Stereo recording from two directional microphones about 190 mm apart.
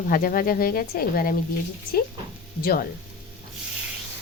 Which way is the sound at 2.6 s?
50° left (ahead or behind).